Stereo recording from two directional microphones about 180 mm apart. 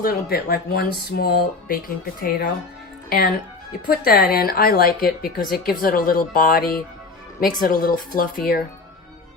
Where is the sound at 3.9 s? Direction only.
55° left (ahead or behind).